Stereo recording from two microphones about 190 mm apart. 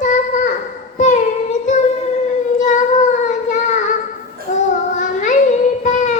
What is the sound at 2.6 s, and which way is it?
Child singing, 40° left (ahead or behind).